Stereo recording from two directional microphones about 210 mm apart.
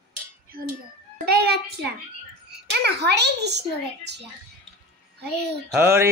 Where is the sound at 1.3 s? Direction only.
50° right (ahead or behind).